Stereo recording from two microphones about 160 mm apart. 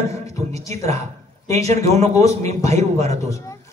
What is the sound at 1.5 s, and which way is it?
A man's voice, 40° right (ahead or behind).